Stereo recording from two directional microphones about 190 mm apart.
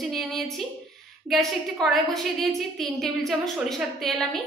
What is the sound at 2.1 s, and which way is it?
A woman's voice, centre (ahead or behind).